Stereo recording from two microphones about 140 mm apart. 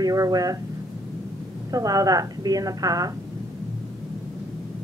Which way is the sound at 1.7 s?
25° right (ahead or behind).